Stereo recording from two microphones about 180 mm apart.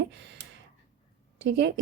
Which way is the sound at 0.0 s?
75° right (ahead or behind).